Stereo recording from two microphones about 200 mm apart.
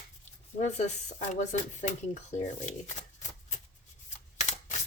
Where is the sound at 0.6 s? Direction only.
35° left (ahead or behind).